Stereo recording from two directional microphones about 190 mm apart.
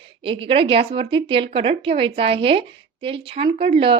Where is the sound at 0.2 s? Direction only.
30° right (ahead or behind).